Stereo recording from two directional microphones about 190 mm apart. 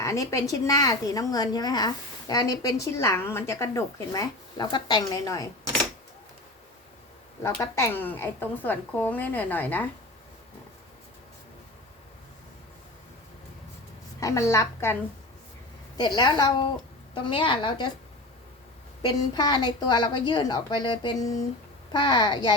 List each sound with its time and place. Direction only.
0.0 s a woman's voice: 15° left (ahead or behind)
7.4 s a woman's voice: 15° left (ahead or behind)
14.2 s a woman's voice: 15° left (ahead or behind)
16.0 s a woman's voice: 20° left (ahead or behind)
19.0 s a woman's voice: 20° left (ahead or behind)